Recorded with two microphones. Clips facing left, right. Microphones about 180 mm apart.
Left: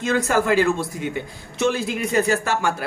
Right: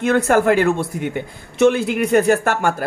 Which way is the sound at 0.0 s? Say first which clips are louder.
Right 5 dB; 60° right (ahead or behind).